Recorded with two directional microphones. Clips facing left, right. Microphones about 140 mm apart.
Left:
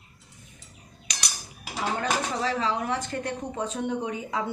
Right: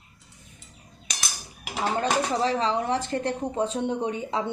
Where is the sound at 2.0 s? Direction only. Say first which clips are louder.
Right 5 dB; 30° right (ahead or behind).